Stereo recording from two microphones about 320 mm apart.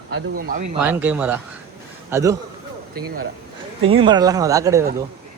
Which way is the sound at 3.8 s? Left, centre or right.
Centre.